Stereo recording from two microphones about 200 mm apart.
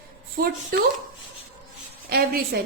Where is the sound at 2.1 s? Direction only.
50° right (ahead or behind).